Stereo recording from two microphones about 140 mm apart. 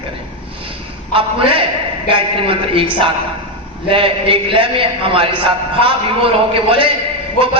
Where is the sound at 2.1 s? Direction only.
40° right (ahead or behind).